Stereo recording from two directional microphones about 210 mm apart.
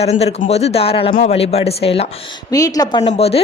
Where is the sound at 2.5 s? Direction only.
15° left (ahead or behind).